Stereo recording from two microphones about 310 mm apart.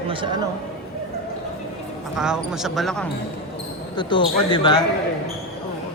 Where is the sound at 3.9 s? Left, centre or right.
Centre.